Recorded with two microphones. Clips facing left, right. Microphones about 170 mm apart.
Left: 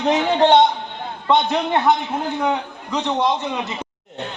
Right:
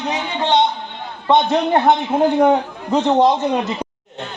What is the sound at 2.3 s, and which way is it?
A man's voice, 50° right (ahead or behind).